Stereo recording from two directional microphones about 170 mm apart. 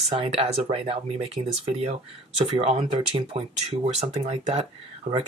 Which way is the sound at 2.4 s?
35° right (ahead or behind).